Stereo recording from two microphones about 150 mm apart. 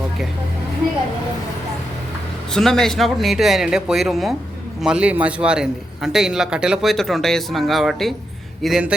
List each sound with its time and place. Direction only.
2.5 s a man's voice: 5° left (ahead or behind)